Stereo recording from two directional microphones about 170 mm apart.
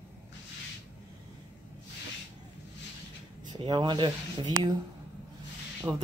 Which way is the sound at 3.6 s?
25° right (ahead or behind).